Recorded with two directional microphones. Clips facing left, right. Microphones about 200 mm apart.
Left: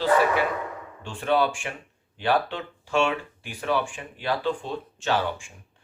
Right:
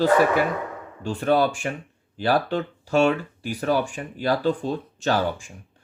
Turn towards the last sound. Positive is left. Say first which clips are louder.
# right 3 dB
turn(degrees=-40)  # may be behind; listen again after turning